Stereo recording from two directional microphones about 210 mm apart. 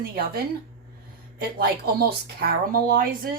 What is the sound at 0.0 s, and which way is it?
Speech, 45° right (ahead or behind).